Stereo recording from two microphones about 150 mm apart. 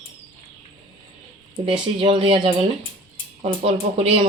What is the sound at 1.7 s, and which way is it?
Speech, 35° right (ahead or behind).